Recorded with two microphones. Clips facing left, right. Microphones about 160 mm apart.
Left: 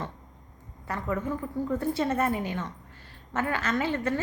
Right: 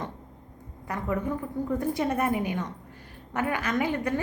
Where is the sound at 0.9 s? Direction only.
15° right (ahead or behind).